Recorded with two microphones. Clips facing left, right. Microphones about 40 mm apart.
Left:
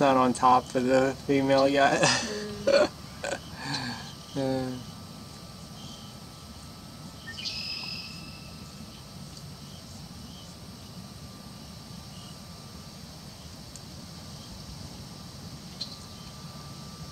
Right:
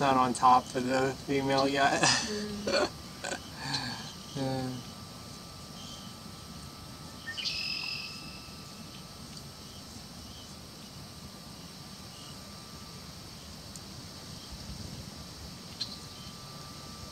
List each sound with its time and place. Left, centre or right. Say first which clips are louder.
0.0 s speech: left 3 dB; left
1.7 s burping: left 4 dB; centre